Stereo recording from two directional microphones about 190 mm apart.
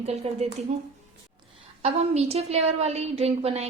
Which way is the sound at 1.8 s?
35° right (ahead or behind).